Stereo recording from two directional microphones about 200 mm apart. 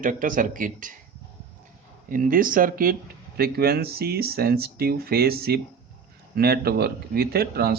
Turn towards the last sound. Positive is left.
turn(degrees=-50)  # may be behind; listen again after turning